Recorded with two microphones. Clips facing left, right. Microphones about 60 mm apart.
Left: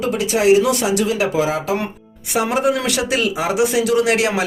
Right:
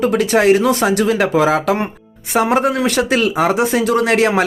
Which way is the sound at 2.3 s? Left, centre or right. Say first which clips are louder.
Right 3 dB; right.